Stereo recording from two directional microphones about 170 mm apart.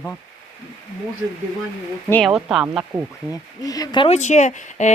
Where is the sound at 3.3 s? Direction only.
20° left (ahead or behind).